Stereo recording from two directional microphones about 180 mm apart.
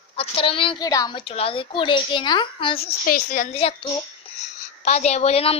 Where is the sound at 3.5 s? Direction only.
30° left (ahead or behind).